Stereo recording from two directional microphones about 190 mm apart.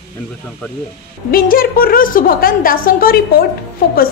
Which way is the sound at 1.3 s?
50° left (ahead or behind).